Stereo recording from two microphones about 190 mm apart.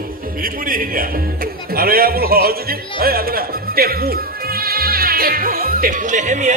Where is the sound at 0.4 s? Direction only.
50° right (ahead or behind).